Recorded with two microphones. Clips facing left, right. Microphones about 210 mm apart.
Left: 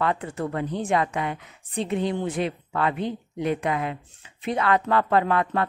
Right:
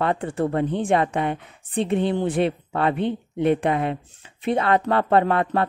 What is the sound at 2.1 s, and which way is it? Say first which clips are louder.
Speech: right 5 dB; 30° right (ahead or behind).